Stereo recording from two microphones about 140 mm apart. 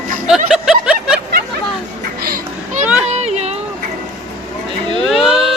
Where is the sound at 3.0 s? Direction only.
50° right (ahead or behind).